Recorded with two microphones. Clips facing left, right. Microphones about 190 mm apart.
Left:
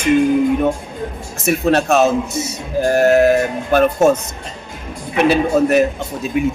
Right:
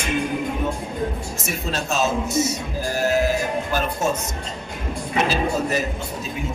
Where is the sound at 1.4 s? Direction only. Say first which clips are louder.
Left 13 dB; 65° left (ahead or behind).